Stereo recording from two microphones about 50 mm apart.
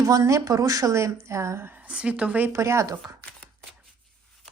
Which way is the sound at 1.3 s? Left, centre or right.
Right.